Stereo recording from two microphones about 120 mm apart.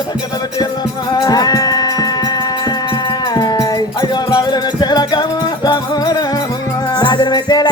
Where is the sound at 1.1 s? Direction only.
35° left (ahead or behind).